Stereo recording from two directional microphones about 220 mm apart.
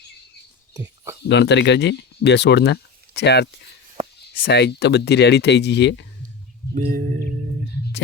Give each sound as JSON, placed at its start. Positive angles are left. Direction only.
{"t": 0.7, "sound": "a sound", "side_deg": -15}
{"t": 1.3, "sound": "speech", "side_deg": 50}
{"t": 6.7, "sound": "music", "side_deg": -35}